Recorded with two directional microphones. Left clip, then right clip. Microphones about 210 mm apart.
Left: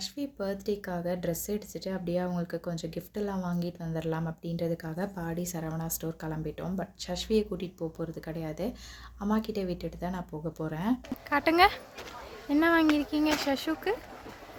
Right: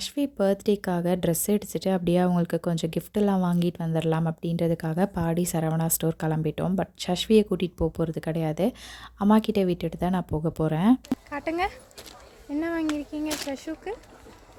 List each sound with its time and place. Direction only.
0.0 s a woman's voice: 45° right (ahead or behind)
11.3 s speech: 5° left (ahead or behind)